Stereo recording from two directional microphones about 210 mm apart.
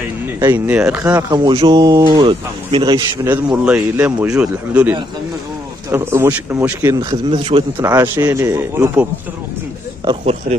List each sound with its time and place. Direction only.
0.4 s speech: 10° right (ahead or behind)
1.3 s speech: 25° right (ahead or behind)
3.6 s speech: 5° right (ahead or behind); by 7.9 s 25° right (ahead or behind)
7.9 s speech: 10° right (ahead or behind)